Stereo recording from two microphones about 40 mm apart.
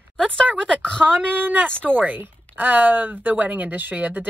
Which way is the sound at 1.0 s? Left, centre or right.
Right.